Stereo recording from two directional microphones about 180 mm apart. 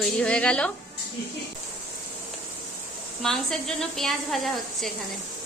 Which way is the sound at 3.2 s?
Centre (ahead or behind).